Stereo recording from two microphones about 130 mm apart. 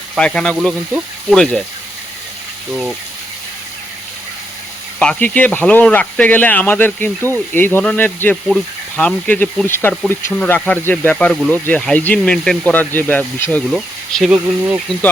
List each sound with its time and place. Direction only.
0.2 s speech: 5° left (ahead or behind)
0.5 s speech: 5° right (ahead or behind)
4.9 s speech: 10° left (ahead or behind)
8.4 s speech: 5° left (ahead or behind)
13.7 s speech: centre (ahead or behind)